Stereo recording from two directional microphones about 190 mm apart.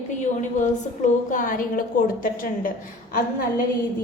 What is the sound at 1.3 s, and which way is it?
A woman's voice, 45° left (ahead or behind).